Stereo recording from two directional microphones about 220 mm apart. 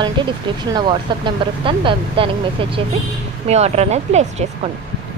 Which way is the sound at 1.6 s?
25° right (ahead or behind).